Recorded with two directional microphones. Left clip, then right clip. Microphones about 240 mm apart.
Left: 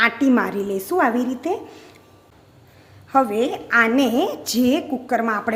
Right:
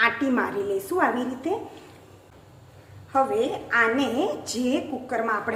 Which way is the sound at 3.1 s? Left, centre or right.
Left.